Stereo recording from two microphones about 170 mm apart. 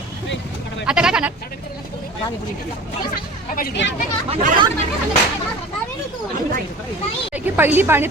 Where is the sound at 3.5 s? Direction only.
60° left (ahead or behind).